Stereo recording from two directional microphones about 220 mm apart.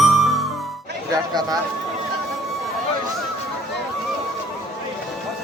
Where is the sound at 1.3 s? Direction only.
20° right (ahead or behind).